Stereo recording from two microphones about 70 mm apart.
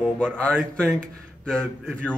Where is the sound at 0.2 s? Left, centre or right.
Centre.